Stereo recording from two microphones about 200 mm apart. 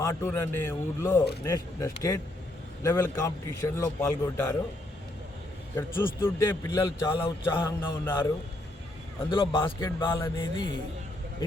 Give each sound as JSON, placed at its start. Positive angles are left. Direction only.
{"t": 0.0, "sound": "a man's voice", "side_deg": 15}
{"t": 5.7, "sound": "a man's voice", "side_deg": 10}
{"t": 9.3, "sound": "speech", "side_deg": 25}
{"t": 10.1, "sound": "a man's voice", "side_deg": 15}